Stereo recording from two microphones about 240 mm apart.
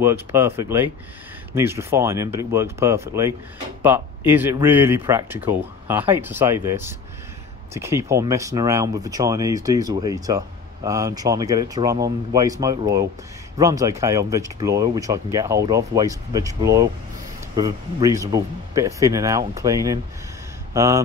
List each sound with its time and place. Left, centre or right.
0.0 s speech: centre